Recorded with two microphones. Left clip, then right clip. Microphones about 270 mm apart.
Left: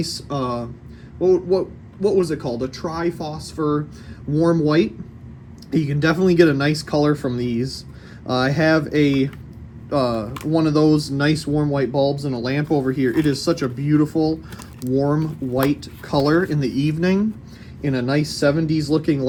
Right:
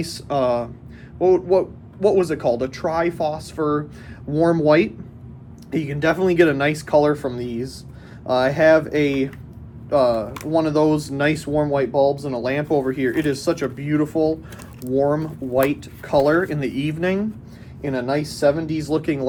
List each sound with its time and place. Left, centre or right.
0.0 s speech: centre
5.7 s speech: left